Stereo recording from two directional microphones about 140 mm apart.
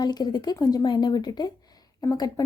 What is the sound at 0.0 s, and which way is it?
A woman's voice, 30° left (ahead or behind).